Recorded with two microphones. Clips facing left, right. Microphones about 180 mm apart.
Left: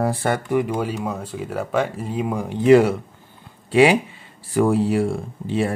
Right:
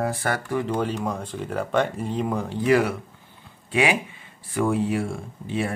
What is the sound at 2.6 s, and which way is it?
Speech, 25° left (ahead or behind).